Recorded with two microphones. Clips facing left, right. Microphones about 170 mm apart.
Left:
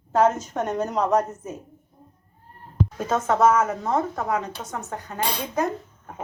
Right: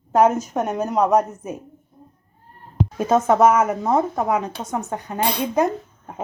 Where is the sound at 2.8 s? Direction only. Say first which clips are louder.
Right 6 dB; 15° right (ahead or behind).